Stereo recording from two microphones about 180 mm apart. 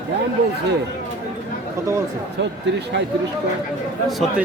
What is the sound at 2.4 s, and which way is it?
Speech, 80° right.